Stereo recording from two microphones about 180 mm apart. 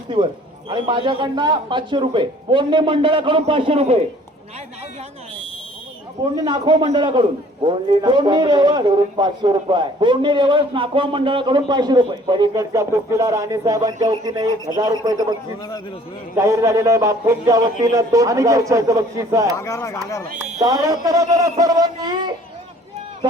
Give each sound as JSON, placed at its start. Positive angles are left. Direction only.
{"t": 0.7, "sound": "a man's voice", "side_deg": -25}
{"t": 6.3, "sound": "a man's voice", "side_deg": -25}
{"t": 16.4, "sound": "speech", "side_deg": -15}
{"t": 19.5, "sound": "speech", "side_deg": 15}
{"t": 20.6, "sound": "a man's voice", "side_deg": -20}